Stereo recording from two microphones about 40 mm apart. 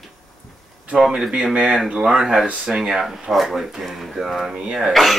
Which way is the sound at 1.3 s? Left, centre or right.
Right.